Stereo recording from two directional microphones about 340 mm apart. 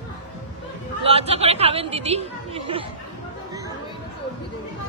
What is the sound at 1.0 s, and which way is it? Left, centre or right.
A woman's voice, centre.